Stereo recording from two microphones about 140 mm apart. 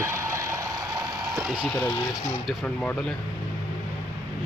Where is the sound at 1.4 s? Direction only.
5° right (ahead or behind).